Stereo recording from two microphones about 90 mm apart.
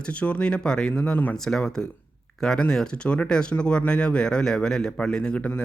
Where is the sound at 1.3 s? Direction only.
5° left (ahead or behind).